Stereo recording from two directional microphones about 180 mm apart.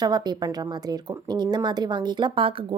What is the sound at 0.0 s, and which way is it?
A woman's voice, 20° right (ahead or behind).